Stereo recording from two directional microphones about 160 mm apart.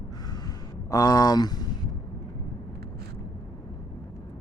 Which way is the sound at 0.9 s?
20° left (ahead or behind).